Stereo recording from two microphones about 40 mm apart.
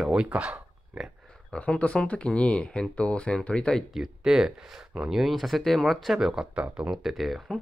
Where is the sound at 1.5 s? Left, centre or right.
Left.